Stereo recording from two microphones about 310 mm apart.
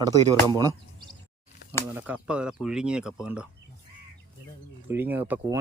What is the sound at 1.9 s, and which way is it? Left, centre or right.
Speech, centre.